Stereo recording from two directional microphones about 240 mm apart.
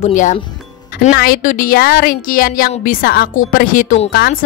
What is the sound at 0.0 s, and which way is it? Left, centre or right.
Speech, left.